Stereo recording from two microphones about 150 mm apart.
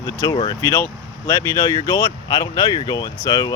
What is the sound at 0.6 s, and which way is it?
Speech, 15° left (ahead or behind).